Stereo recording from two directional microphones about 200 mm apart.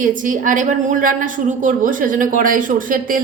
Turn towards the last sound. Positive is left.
turn(degrees=-45)  # may be behind; listen again after turning